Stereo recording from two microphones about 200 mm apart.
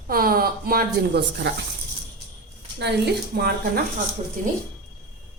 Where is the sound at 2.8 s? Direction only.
55° right (ahead or behind).